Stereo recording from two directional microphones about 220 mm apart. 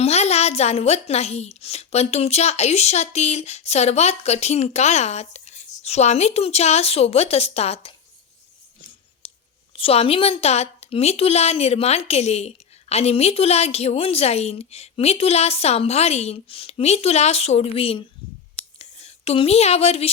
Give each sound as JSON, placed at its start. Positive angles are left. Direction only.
{"t": 0.0, "sound": "a woman's voice", "side_deg": 30}
{"t": 9.7, "sound": "a woman's voice", "side_deg": 25}
{"t": 18.5, "sound": "a sound", "side_deg": 30}